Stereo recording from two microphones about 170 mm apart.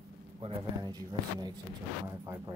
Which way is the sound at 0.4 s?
30° right (ahead or behind).